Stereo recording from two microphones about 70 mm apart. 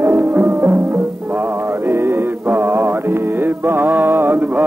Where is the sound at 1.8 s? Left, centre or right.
Right.